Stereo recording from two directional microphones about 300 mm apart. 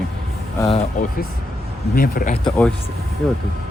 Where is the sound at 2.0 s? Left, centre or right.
Left.